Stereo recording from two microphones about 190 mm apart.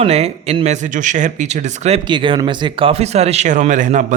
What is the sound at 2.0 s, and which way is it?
Speech, 25° right (ahead or behind).